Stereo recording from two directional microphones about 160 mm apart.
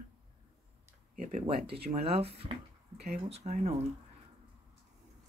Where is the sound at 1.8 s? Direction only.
40° right (ahead or behind).